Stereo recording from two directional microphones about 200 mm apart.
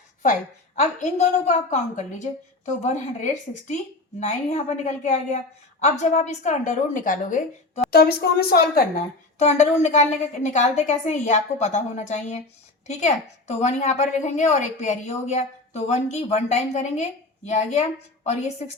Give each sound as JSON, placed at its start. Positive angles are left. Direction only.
{"t": 0.8, "sound": "a woman's voice", "side_deg": 35}